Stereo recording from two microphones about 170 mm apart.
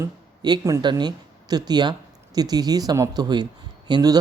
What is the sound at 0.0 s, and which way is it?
Speech, 20° right (ahead or behind).